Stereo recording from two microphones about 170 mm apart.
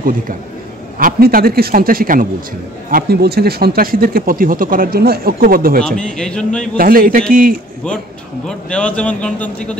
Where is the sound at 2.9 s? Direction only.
70° right (ahead or behind).